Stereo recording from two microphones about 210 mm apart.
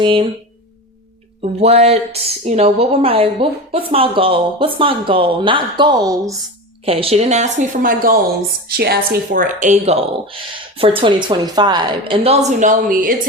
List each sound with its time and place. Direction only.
0.0 s a woman's voice: 25° right (ahead or behind)
1.4 s a woman's voice: 30° right (ahead or behind)